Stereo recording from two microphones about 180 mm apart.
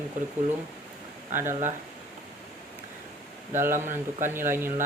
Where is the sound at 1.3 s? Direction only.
15° right (ahead or behind).